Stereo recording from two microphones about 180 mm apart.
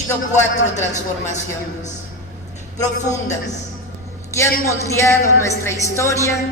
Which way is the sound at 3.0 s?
40° left (ahead or behind).